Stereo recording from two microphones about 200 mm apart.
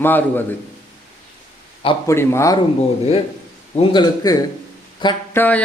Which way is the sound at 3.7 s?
20° left (ahead or behind).